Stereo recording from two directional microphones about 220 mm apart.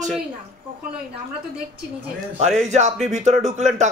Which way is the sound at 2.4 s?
30° right (ahead or behind).